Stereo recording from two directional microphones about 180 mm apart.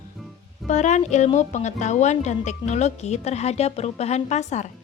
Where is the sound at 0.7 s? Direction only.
40° left (ahead or behind).